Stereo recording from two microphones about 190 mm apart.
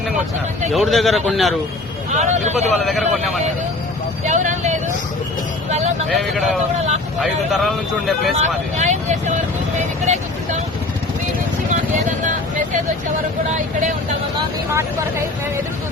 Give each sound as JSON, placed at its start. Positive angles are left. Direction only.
{"t": 0.7, "sound": "speech", "side_deg": 0}
{"t": 2.1, "sound": "speech", "side_deg": -40}
{"t": 2.6, "sound": "speech", "side_deg": 0}
{"t": 4.3, "sound": "vehicle", "side_deg": -40}
{"t": 6.1, "sound": "speech", "side_deg": 0}
{"t": 8.4, "sound": "speech", "side_deg": -40}